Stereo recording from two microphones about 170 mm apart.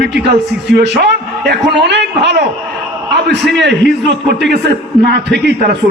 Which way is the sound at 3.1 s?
80° right.